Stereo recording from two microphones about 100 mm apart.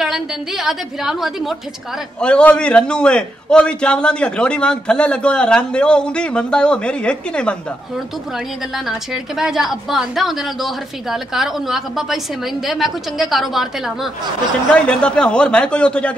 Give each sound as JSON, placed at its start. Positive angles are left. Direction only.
{"t": 0.0, "sound": "a woman's voice", "side_deg": -5}
{"t": 2.1, "sound": "a man's voice", "side_deg": 10}
{"t": 8.7, "sound": "a woman's voice", "side_deg": -5}
{"t": 14.7, "sound": "a man's voice", "side_deg": 10}